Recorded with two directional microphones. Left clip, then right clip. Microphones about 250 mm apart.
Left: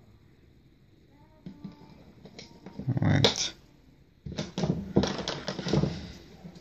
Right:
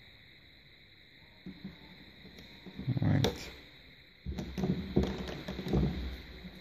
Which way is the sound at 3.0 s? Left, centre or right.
Centre.